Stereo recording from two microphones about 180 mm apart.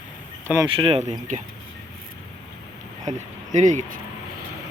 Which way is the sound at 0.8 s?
30° right (ahead or behind).